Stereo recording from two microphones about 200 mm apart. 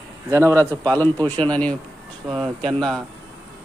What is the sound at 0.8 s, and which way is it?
A man's voice, 10° left (ahead or behind).